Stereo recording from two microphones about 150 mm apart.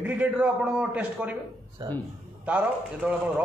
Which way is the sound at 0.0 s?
10° right (ahead or behind).